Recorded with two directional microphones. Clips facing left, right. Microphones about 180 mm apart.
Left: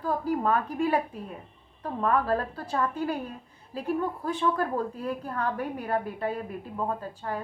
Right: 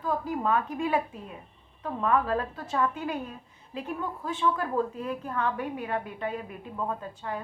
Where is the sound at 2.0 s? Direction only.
40° left (ahead or behind).